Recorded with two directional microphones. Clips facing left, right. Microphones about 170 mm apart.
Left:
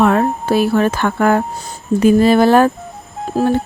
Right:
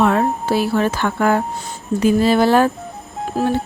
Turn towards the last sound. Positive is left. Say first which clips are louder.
# left 3 dB
turn(degrees=45)  # may be behind; listen again after turning